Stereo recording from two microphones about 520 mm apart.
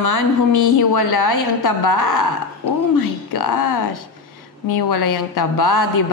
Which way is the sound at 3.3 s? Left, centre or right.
Left.